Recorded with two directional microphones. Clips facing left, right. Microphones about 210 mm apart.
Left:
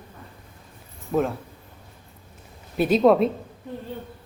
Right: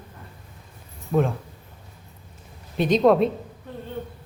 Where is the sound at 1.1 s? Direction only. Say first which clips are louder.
Right 1 dB; centre (ahead or behind).